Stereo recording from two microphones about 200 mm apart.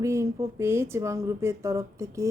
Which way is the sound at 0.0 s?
15° right (ahead or behind).